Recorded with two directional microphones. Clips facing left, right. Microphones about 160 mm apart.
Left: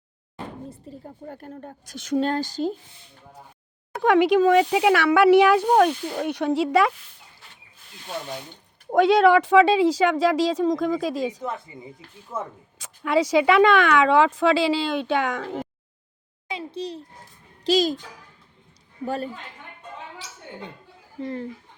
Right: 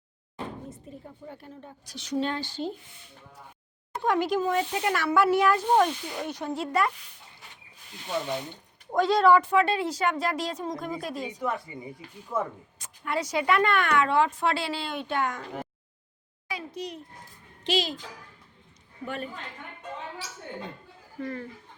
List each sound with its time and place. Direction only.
0.7 s speech: 35° left (ahead or behind)
1.2 s speech: 50° left (ahead or behind)
3.9 s speech: 75° left (ahead or behind); by 6.3 s 55° left (ahead or behind)
6.3 s speech: 80° left
8.9 s speech: 65° left (ahead or behind); by 11.3 s 90° left
11.4 s speech: 25° left (ahead or behind)
12.8 s speech: 90° left
16.5 s a child's voice: 25° left (ahead or behind)
17.6 s a child's voice: 40° left (ahead or behind)
19.0 s speech: 35° left (ahead or behind)
21.2 s speech: 25° left (ahead or behind)